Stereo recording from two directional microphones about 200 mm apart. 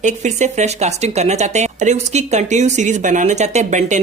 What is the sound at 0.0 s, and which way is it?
Speech, 35° right (ahead or behind).